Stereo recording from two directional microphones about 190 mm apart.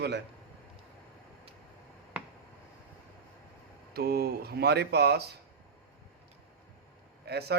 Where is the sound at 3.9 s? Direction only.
55° right (ahead or behind).